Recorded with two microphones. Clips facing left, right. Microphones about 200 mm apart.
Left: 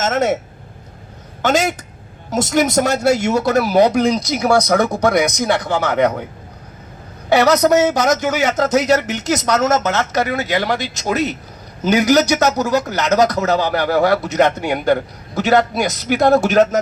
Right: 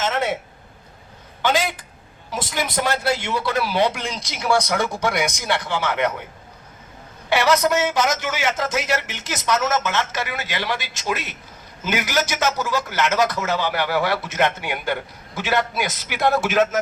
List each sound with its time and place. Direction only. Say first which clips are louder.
0.0 s a sound: left 6 dB; 45° left (ahead or behind)
1.4 s a woman's voice: left 5 dB; 45° left (ahead or behind)
7.3 s a man's voice: left 6 dB; 40° left (ahead or behind)